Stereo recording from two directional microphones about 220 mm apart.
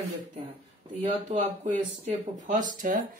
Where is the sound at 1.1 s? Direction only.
30° right (ahead or behind).